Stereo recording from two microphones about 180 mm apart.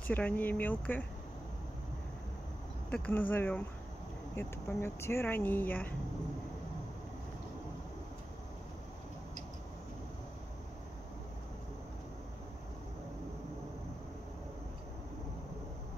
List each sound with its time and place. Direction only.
0.1 s speech: 10° left (ahead or behind)
2.9 s speech: 10° left (ahead or behind)